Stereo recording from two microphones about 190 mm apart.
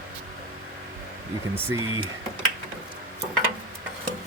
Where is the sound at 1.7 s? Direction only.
90° right.